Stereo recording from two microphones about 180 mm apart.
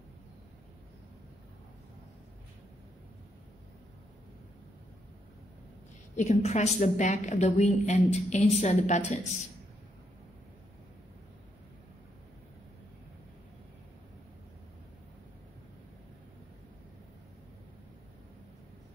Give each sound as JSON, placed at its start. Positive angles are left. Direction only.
{"t": 6.1, "sound": "a woman's voice", "side_deg": 40}